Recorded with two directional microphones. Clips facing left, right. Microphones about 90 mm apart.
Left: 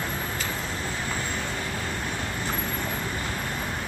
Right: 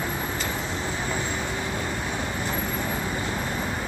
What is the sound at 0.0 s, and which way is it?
Vehicle, 10° right (ahead or behind).